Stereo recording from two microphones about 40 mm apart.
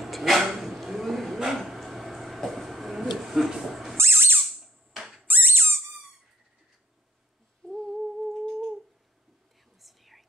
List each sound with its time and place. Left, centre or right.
0.0 s dog: centre
0.7 s vehicle: centre
1.7 s a sound: centre
4.1 s squeak: right
4.5 s a sound: centre
5.2 s squeak: right
7.6 s humming: centre
7.9 s humming: centre
9.8 s whispering: centre